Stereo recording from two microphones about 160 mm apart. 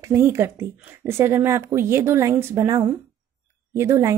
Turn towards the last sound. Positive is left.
turn(degrees=-20)  # may be behind; listen again after turning